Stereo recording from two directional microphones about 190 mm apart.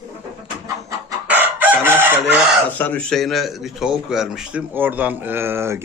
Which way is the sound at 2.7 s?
10° left (ahead or behind).